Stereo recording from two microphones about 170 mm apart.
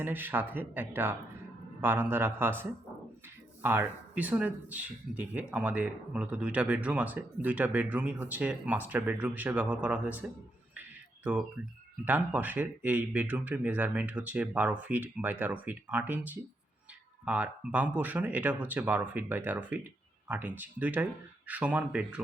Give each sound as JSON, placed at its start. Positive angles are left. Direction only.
{"t": 0.0, "sound": "speech", "side_deg": -10}
{"t": 10.8, "sound": "a sound", "side_deg": -10}
{"t": 12.0, "sound": "speech", "side_deg": -10}